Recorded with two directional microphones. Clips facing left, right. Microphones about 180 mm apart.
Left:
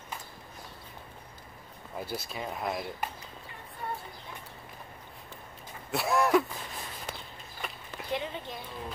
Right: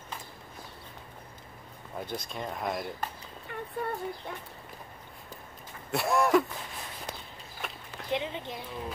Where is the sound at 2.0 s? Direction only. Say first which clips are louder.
Even; 5° left (ahead or behind).